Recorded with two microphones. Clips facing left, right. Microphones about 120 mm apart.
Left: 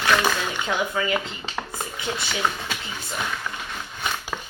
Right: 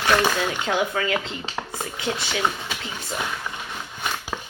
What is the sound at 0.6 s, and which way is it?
Speech, 25° right (ahead or behind).